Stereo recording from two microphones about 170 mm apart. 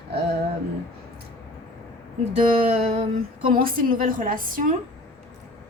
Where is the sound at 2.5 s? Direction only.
35° right (ahead or behind).